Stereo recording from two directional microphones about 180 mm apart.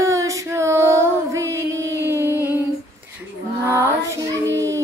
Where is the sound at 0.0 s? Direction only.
15° right (ahead or behind).